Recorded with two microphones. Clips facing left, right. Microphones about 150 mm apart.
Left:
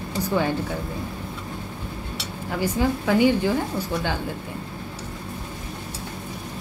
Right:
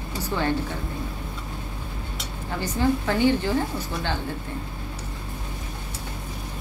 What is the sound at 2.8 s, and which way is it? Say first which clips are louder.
Speech: left 1 dB; 10° left (ahead or behind).